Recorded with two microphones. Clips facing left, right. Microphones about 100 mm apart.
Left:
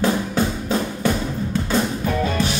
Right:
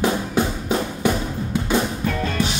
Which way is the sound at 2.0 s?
15° left (ahead or behind).